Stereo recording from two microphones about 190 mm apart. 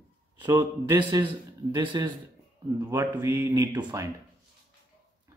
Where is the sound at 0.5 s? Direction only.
15° right (ahead or behind).